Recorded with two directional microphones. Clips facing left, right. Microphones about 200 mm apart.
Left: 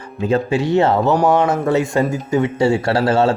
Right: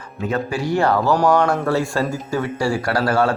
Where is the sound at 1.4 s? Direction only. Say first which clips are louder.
Left 2 dB; 20° left (ahead or behind).